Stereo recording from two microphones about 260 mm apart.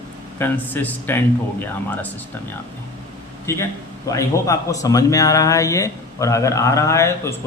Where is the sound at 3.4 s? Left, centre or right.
Centre.